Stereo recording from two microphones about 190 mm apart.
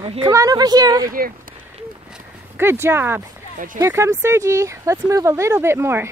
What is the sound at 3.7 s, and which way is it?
Speech, 15° right (ahead or behind).